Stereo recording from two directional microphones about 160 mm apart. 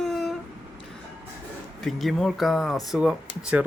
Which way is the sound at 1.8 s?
Centre (ahead or behind).